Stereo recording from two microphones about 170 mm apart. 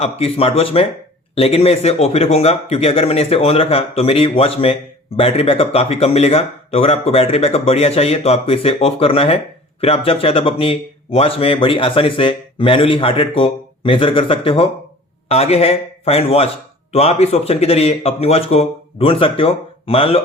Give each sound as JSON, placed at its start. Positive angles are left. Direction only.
{"t": 0.0, "sound": "a man's voice", "side_deg": 35}